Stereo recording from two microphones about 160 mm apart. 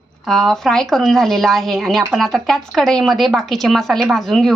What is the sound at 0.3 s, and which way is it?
Speech, 5° left (ahead or behind).